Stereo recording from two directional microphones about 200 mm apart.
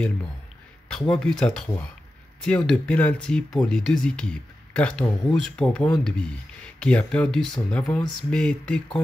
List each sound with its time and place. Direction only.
0.8 s speech: 5° left (ahead or behind)